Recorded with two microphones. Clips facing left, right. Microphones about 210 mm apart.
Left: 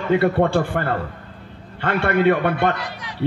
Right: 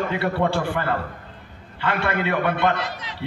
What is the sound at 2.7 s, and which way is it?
Speech, 20° right (ahead or behind).